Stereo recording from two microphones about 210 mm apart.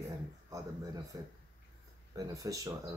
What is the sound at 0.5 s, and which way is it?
Speech, 15° right (ahead or behind).